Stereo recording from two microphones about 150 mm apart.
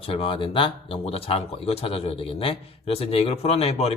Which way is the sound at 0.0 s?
35° left (ahead or behind).